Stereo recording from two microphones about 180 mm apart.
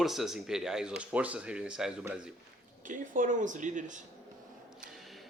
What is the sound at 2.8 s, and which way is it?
Speech, 45° right (ahead or behind).